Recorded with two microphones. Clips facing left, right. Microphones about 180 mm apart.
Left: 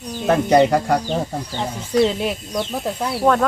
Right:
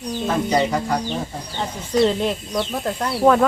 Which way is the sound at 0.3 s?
60° left (ahead or behind).